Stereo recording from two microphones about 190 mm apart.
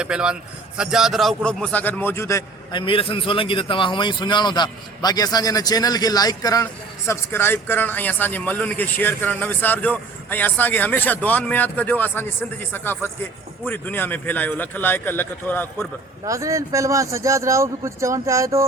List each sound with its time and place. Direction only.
0.0 s a man's voice: 5° right (ahead or behind); by 2.8 s 15° left (ahead or behind)
2.8 s a man's voice: 30° left (ahead or behind); by 15.9 s 10° left (ahead or behind)
16.2 s a man's voice: 15° right (ahead or behind)